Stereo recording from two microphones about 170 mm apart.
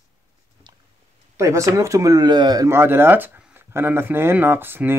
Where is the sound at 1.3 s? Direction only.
15° right (ahead or behind).